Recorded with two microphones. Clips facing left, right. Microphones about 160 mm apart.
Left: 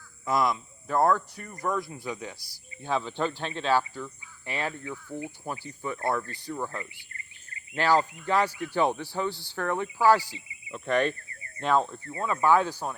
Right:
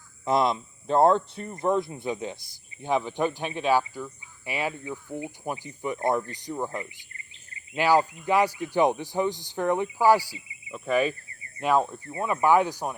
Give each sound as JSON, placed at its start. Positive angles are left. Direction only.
{"t": 0.3, "sound": "speech", "side_deg": -25}
{"t": 7.8, "sound": "speech", "side_deg": -10}